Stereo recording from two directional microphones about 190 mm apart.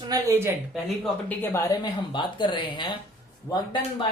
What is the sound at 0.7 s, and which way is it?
Speech, 5° left (ahead or behind).